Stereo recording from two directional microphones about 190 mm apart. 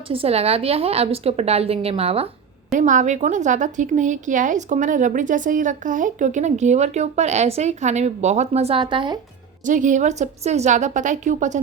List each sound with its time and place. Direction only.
0.1 s a woman's voice: 30° right (ahead or behind)
9.6 s a woman's voice: 40° right (ahead or behind)